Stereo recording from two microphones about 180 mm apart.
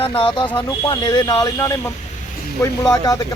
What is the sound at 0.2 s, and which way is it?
Speech, 25° left (ahead or behind).